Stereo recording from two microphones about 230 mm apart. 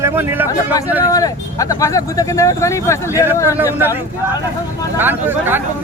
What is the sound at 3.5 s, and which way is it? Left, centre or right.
Speech, centre.